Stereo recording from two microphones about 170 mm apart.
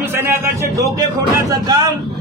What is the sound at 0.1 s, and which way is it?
A man's voice, 15° right (ahead or behind).